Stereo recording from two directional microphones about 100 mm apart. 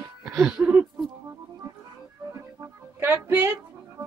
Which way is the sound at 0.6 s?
15° right (ahead or behind).